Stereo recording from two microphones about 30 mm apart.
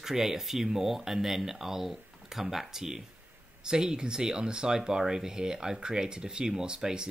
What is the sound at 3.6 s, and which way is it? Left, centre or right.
Speech, right.